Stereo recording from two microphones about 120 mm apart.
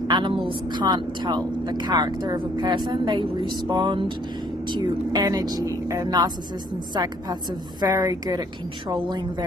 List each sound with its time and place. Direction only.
0.1 s a woman's voice: 40° right (ahead or behind)